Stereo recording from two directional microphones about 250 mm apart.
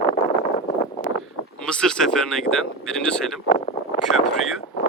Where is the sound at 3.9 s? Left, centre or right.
Centre.